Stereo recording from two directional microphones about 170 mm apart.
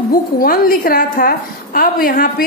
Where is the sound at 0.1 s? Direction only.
60° left (ahead or behind).